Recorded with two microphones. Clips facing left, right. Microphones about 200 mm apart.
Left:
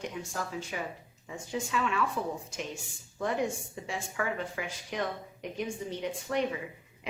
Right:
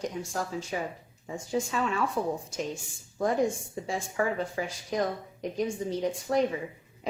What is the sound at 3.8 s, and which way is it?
A woman's voice, 35° right (ahead or behind).